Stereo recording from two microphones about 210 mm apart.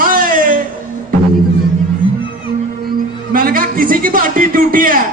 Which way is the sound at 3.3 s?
45° right (ahead or behind).